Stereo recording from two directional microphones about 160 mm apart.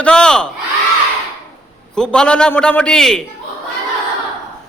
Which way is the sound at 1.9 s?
5° left (ahead or behind).